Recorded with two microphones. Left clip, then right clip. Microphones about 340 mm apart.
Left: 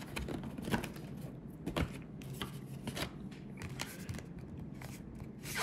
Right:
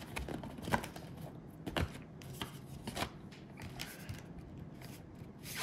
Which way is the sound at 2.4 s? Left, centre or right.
Centre.